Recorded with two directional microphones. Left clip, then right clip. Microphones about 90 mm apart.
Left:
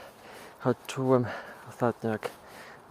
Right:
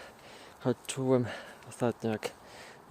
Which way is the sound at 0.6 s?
20° left (ahead or behind).